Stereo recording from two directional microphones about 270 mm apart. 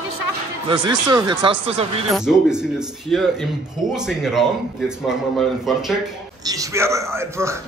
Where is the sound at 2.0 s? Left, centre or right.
Centre.